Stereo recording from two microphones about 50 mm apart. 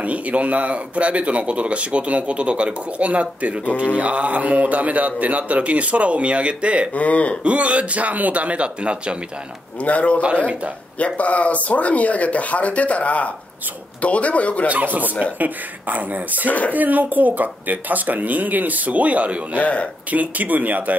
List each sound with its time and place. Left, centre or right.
0.0 s speech: right
7.0 s speech: left
7.4 s speech: right
9.8 s speech: left
14.7 s speech: right
16.4 s speech: left
16.7 s speech: right
19.6 s speech: left
20.1 s speech: right